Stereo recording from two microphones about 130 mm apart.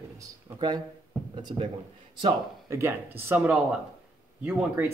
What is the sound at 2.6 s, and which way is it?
Speech, 20° right (ahead or behind).